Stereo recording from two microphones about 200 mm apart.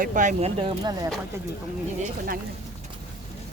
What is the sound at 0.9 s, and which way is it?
Speech, 15° right (ahead or behind).